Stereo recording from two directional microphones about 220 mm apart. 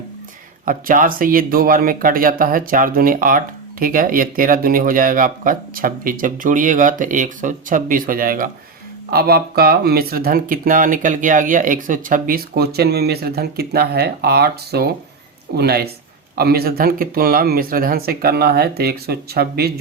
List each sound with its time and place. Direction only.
0.6 s speech: 40° right (ahead or behind)